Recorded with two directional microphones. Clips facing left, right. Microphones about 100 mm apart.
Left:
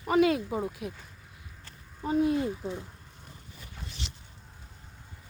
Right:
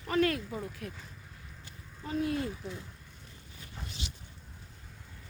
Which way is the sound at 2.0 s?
20° left (ahead or behind).